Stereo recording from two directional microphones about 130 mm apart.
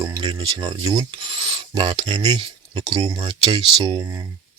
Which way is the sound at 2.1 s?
30° right (ahead or behind).